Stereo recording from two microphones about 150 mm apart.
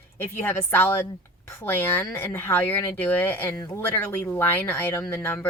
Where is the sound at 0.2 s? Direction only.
15° left (ahead or behind).